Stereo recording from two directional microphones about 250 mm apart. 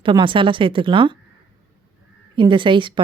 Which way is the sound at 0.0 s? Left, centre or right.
Centre.